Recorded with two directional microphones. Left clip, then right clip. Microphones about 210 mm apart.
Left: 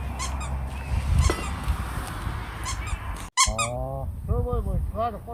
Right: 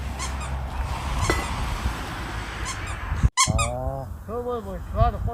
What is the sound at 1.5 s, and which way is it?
Goose, 45° right (ahead or behind).